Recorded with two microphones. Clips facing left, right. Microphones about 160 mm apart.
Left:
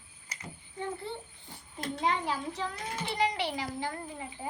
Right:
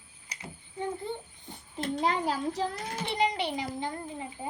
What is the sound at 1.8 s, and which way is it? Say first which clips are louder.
Speech: right 3 dB; 35° right (ahead or behind).